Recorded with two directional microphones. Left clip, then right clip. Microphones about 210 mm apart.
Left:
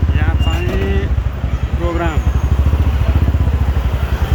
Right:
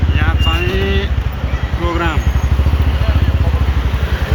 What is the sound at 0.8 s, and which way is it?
Vehicle, 15° left (ahead or behind).